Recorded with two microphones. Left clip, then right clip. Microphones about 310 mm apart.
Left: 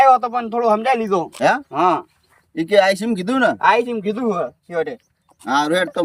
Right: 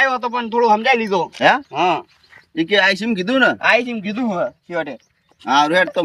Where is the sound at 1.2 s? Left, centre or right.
Centre.